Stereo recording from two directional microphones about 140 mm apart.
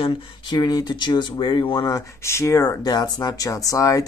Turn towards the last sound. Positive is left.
turn(degrees=25)  # may be behind; listen again after turning